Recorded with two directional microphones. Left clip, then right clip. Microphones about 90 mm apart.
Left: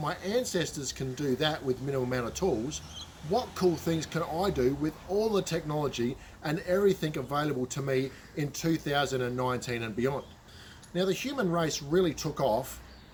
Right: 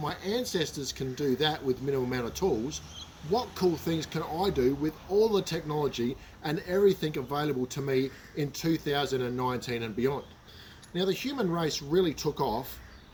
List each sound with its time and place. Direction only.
0.0 s speech: 35° left (ahead or behind)